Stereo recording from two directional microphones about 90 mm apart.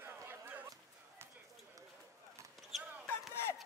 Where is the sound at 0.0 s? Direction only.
25° right (ahead or behind).